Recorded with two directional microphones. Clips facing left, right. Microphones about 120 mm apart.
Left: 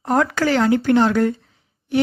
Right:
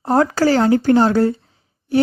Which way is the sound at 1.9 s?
35° right (ahead or behind).